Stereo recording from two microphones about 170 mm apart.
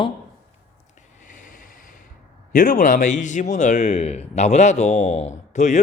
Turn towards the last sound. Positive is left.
turn(degrees=45)  # may be behind; listen again after turning